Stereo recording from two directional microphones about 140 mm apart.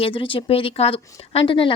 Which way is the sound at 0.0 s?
40° left (ahead or behind).